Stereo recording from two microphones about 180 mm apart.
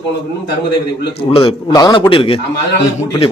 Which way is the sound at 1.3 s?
30° left (ahead or behind).